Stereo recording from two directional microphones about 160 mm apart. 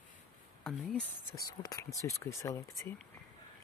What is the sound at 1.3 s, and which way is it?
Speech, 20° left (ahead or behind).